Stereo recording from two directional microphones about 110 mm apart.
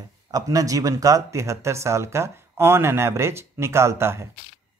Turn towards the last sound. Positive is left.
turn(degrees=-25)  # may be behind; listen again after turning